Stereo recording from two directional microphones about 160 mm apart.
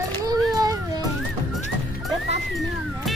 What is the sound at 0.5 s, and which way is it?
Baby cry, 20° right (ahead or behind).